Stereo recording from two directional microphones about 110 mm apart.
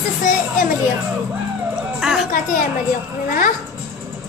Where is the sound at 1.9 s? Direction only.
5° right (ahead or behind).